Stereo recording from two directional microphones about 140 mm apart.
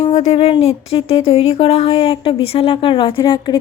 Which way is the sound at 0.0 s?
50° left (ahead or behind).